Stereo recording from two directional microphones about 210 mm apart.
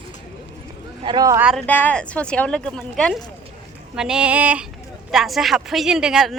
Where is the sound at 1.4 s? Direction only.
5° left (ahead or behind).